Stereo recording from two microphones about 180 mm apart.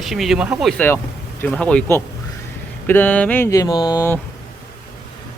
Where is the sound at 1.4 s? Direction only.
5° left (ahead or behind).